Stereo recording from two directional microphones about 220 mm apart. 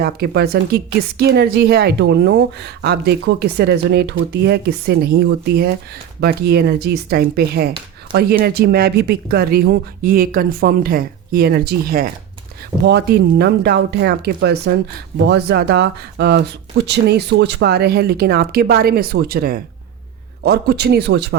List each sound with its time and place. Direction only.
0.0 s speech: 45° right (ahead or behind)